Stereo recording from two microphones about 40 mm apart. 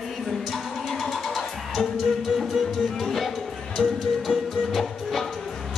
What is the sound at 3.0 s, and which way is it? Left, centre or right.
Music, centre.